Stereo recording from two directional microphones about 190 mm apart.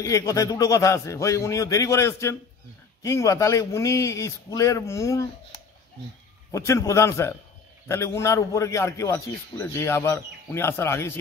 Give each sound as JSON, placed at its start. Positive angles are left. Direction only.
{"t": 0.0, "sound": "a man's voice", "side_deg": 15}
{"t": 6.5, "sound": "a man's voice", "side_deg": 15}